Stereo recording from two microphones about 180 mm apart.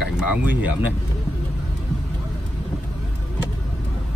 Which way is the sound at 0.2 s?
10° right (ahead or behind).